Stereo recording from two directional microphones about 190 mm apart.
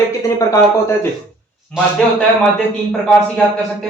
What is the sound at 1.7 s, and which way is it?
Speech, 5° left (ahead or behind).